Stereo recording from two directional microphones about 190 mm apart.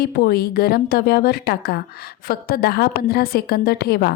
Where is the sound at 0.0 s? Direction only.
50° left (ahead or behind).